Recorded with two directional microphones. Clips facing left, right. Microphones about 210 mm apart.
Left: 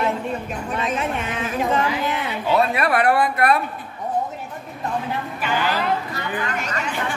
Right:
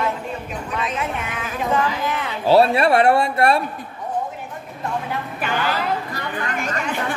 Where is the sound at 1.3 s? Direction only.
25° left (ahead or behind).